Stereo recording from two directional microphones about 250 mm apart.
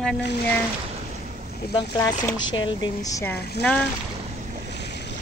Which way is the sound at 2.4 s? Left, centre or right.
Left.